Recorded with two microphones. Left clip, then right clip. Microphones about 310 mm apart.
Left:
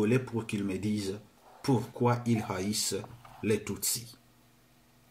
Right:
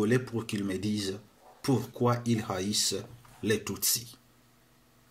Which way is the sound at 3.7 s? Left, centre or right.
Centre.